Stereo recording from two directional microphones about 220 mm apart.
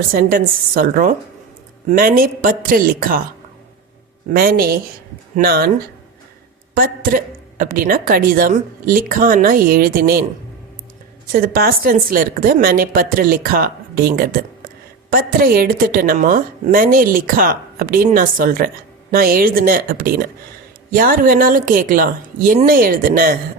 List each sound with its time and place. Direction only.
0.1 s a woman's voice: 40° right (ahead or behind)
4.3 s speech: 45° right (ahead or behind)
6.7 s a woman's voice: 40° right (ahead or behind)
11.3 s a woman's voice: 40° right (ahead or behind)